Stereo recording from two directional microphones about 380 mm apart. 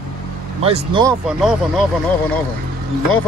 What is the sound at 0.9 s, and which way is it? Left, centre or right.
Speech, centre.